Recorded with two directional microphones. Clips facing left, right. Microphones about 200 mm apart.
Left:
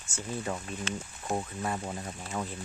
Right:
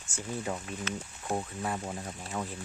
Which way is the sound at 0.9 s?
30° left (ahead or behind).